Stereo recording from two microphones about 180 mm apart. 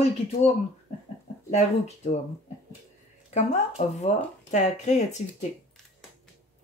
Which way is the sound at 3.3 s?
40° left (ahead or behind).